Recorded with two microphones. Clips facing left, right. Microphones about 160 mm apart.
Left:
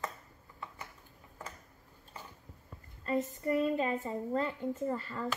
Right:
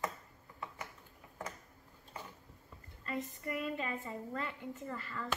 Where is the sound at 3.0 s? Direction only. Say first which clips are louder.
Left 8 dB; 35° left (ahead or behind).